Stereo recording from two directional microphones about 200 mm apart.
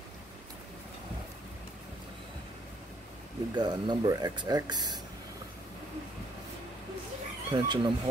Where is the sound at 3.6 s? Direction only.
20° right (ahead or behind).